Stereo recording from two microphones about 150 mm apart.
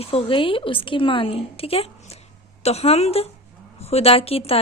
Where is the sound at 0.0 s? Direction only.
40° left (ahead or behind).